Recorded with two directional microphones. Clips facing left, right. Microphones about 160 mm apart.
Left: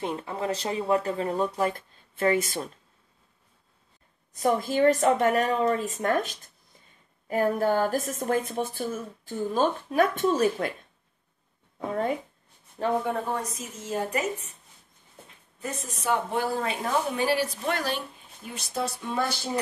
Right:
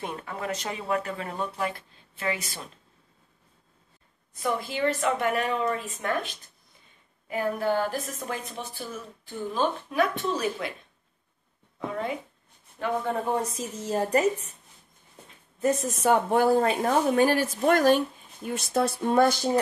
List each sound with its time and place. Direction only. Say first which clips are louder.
0.0 s a woman's voice: left 3 dB; 25° left (ahead or behind)
1.4 s a woman's voice: left 4 dB; 45° left (ahead or behind)
4.3 s a woman's voice: left 5 dB; 40° left (ahead or behind)
11.9 s a woman's voice: left 4 dB; 45° left (ahead or behind)
13.3 s a woman's voice: right 4 dB; 30° right (ahead or behind)
15.9 s speech: right 1 dB; 50° right (ahead or behind)